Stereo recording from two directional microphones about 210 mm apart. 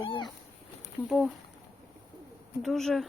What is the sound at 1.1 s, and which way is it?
Speech, centre (ahead or behind).